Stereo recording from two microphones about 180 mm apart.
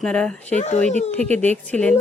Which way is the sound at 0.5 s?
40° left (ahead or behind).